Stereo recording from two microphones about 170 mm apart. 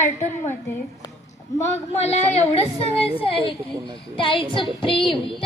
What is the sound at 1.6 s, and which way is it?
Child singing, 40° left (ahead or behind).